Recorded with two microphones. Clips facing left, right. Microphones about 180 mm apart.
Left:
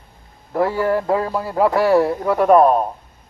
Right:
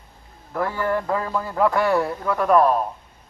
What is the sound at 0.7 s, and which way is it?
Speech, 10° left (ahead or behind).